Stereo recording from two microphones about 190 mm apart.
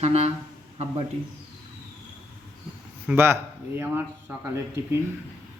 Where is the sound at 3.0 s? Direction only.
10° right (ahead or behind).